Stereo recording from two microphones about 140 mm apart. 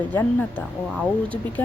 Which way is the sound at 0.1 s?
10° left (ahead or behind).